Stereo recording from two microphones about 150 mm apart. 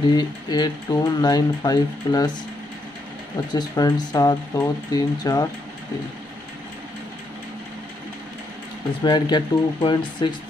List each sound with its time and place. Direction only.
0.1 s speech: 25° left (ahead or behind)
3.5 s speech: 25° left (ahead or behind)
9.0 s speech: 30° left (ahead or behind)